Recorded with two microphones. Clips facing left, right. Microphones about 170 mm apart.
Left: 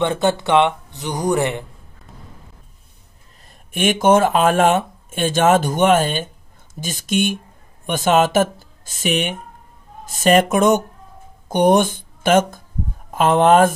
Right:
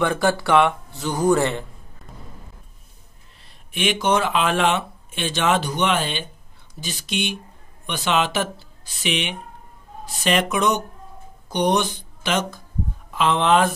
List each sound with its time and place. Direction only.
0.0 s speech: 25° left (ahead or behind)
3.7 s speech: 50° left (ahead or behind)